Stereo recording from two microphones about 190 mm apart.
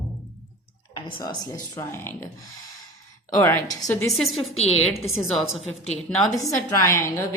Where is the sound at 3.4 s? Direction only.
15° left (ahead or behind).